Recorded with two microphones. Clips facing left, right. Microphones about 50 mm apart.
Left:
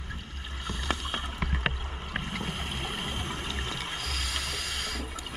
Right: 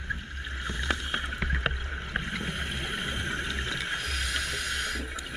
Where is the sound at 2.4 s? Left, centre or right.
Right.